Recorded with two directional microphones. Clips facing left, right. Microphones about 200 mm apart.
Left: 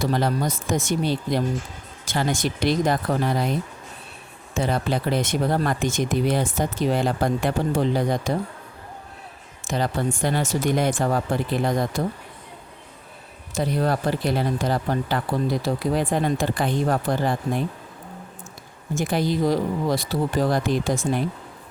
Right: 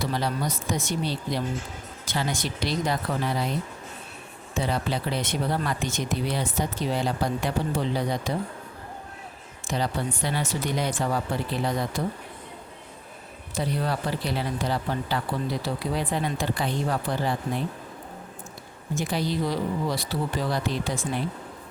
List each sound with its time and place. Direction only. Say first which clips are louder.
0.0 s speech: left 5 dB; 50° left (ahead or behind)
4.5 s speech: left 4 dB; 45° left (ahead or behind)
9.6 s speech: left 4 dB; 50° left (ahead or behind)
13.5 s speech: left 5 dB; 45° left (ahead or behind)
18.9 s speech: left 4 dB; 50° left (ahead or behind)